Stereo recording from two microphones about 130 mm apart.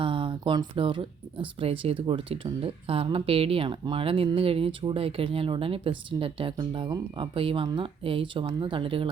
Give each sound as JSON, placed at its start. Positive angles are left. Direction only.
{"t": 0.0, "sound": "speech", "side_deg": -40}